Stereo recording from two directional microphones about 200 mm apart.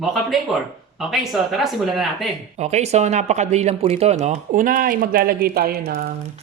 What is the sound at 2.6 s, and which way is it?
Speech, 35° right (ahead or behind).